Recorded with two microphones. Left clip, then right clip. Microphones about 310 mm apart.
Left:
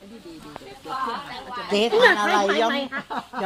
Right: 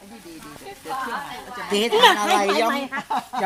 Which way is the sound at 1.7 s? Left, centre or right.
Centre.